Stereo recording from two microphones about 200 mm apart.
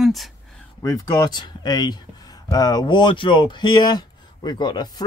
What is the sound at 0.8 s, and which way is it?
Speech, 20° left (ahead or behind).